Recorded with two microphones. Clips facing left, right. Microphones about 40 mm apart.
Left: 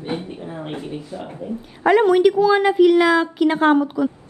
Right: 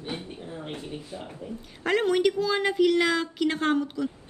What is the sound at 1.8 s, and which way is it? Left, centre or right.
A woman's voice, centre.